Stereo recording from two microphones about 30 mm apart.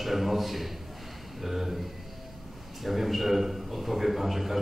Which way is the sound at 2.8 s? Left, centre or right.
Centre.